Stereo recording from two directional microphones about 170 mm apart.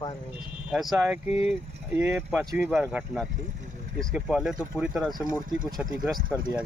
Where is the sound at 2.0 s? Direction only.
10° right (ahead or behind).